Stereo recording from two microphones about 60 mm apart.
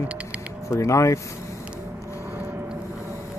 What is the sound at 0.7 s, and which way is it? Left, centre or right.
Speech, left.